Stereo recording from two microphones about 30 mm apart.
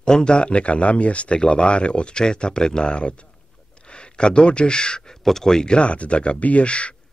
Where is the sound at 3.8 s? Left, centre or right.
Left.